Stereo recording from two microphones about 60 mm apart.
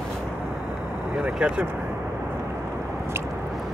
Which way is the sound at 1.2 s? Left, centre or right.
Centre.